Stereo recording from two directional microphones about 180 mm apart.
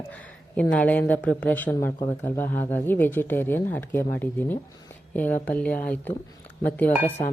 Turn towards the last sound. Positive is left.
turn(degrees=10)  # may be behind; listen again after turning